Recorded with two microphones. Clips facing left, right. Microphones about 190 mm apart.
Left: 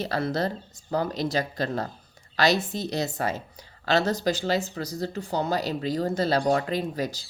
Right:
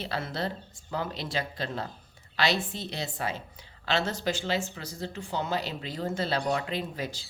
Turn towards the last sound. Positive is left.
turn(degrees=40)  # may be behind; listen again after turning